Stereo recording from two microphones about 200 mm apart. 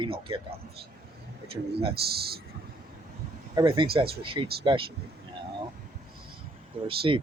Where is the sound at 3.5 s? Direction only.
25° right (ahead or behind).